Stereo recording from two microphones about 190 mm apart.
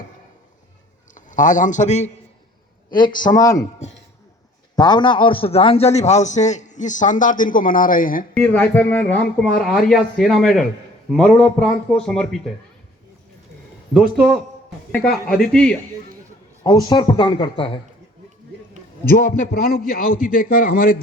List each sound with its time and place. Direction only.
1.1 s a man's voice: 45° left (ahead or behind)
3.2 s speech: 20° left (ahead or behind)
4.8 s a man's voice: 25° left (ahead or behind); by 8.3 s 45° left (ahead or behind)
8.4 s speech: 5° left (ahead or behind)
13.9 s speech: centre (ahead or behind)
16.9 s speech: 25° left (ahead or behind)
19.1 s a man's voice: 55° left (ahead or behind)